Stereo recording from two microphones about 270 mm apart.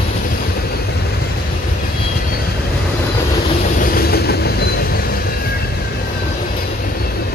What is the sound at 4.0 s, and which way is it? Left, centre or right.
Train, left.